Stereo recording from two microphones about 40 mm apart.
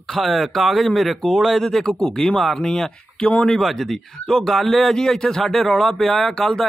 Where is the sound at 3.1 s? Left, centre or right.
Left.